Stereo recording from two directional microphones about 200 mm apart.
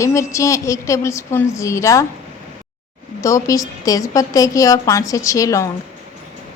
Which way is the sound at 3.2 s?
15° left (ahead or behind).